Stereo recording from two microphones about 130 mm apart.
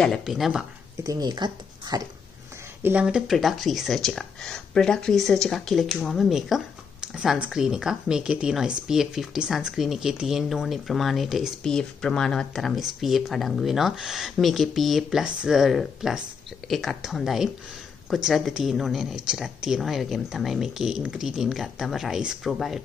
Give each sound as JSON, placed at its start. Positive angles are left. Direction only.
{"t": 0.0, "sound": "speech", "side_deg": 0}
{"t": 1.0, "sound": "speech", "side_deg": -30}
{"t": 2.8, "sound": "speech", "side_deg": -10}